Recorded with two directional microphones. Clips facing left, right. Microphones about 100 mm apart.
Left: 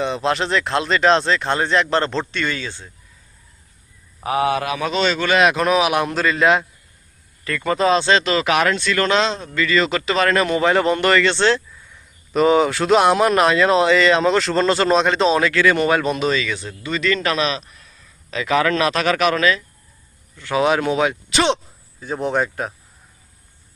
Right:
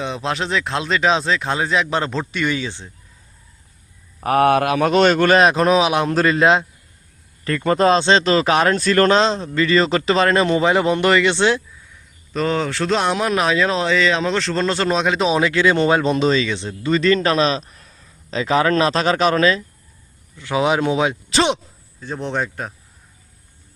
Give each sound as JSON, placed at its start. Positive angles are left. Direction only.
{"t": 0.0, "sound": "speech", "side_deg": 0}
{"t": 4.2, "sound": "speech", "side_deg": -55}
{"t": 5.4, "sound": "speech", "side_deg": -35}
{"t": 12.3, "sound": "speech", "side_deg": 10}
{"t": 15.4, "sound": "speech", "side_deg": -20}
{"t": 20.4, "sound": "speech", "side_deg": -20}
{"t": 22.0, "sound": "speech", "side_deg": 5}